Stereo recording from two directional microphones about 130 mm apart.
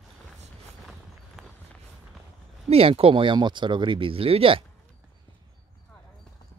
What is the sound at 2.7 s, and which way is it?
Speech, 45° right (ahead or behind).